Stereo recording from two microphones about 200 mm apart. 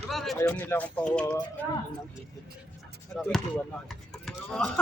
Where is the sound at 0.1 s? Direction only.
Centre (ahead or behind).